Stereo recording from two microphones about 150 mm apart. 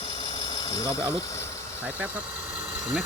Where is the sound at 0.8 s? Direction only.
20° left (ahead or behind).